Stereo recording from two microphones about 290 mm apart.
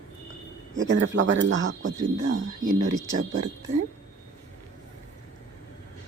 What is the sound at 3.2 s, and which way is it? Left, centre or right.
Speech, right.